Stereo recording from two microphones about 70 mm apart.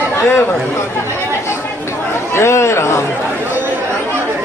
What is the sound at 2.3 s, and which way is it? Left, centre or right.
Speech, left.